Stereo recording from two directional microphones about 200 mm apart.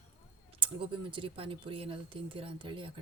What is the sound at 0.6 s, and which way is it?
Speech, 25° right (ahead or behind).